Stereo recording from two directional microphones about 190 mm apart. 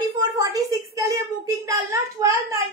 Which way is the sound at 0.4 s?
20° right (ahead or behind).